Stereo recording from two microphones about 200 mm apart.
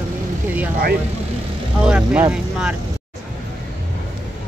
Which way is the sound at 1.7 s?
5° right (ahead or behind).